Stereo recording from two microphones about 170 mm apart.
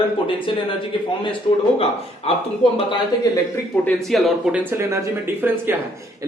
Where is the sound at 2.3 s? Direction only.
35° left (ahead or behind).